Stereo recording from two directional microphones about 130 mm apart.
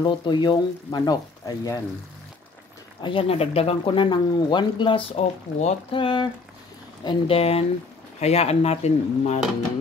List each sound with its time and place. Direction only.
0.0 s speech: 35° left (ahead or behind)
3.0 s speech: 40° left (ahead or behind)
5.1 s speech: 55° left (ahead or behind)
5.9 s speech: 40° left (ahead or behind)
7.2 s speech: 50° left (ahead or behind)